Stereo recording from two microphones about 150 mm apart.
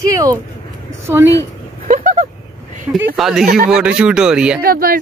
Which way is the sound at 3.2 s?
Centre (ahead or behind).